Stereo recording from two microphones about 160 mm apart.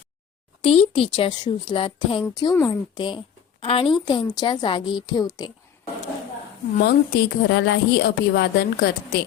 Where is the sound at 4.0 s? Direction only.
25° left (ahead or behind).